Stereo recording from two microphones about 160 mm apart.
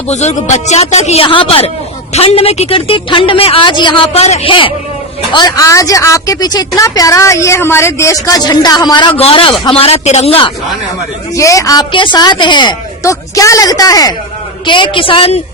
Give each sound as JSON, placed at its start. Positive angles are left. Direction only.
{"t": 0.1, "sound": "a woman's voice", "side_deg": 45}
{"t": 11.3, "sound": "a woman's voice", "side_deg": 20}